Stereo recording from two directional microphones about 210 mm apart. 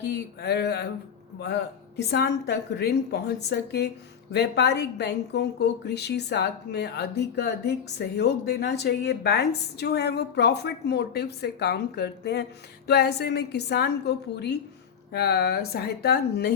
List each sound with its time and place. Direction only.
0.0 s a woman's voice: 50° left (ahead or behind)